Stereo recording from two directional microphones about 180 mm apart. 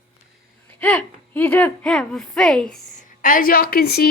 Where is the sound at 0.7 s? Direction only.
10° left (ahead or behind).